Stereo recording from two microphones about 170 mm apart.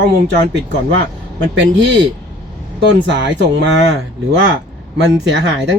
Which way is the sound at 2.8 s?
90° right.